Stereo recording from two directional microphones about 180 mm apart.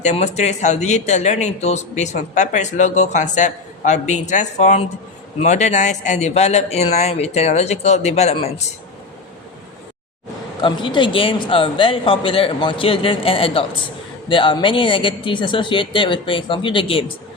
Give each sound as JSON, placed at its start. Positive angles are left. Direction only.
{"t": 0.0, "sound": "speech", "side_deg": 40}
{"t": 10.6, "sound": "speech", "side_deg": 25}